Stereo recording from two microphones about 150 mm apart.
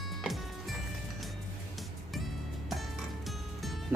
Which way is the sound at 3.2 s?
Centre (ahead or behind).